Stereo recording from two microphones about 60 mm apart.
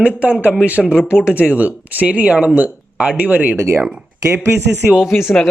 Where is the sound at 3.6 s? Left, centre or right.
Right.